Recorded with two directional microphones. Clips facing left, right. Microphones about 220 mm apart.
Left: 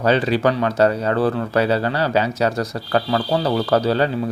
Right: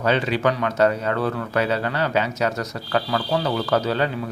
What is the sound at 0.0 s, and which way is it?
Speech, 35° left (ahead or behind).